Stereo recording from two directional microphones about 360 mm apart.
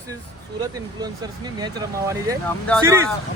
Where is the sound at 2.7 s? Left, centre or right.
Centre.